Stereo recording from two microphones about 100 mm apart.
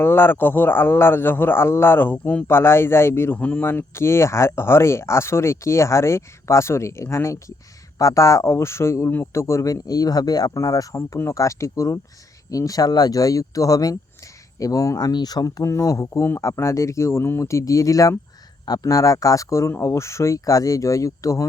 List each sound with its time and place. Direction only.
0.0 s a man's voice: 25° left (ahead or behind)